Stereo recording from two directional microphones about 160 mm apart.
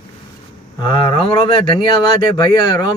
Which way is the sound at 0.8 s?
30° left (ahead or behind).